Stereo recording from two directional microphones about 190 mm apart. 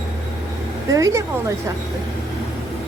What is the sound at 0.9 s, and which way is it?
Speech, 15° right (ahead or behind).